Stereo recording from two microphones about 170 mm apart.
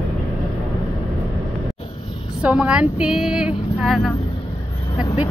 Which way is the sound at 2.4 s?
5° right (ahead or behind).